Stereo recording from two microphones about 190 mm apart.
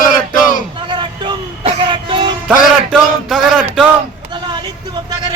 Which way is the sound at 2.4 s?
Centre (ahead or behind).